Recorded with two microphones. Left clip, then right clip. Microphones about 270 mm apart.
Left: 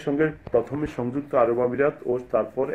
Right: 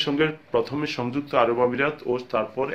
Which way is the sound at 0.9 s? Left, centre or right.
Centre.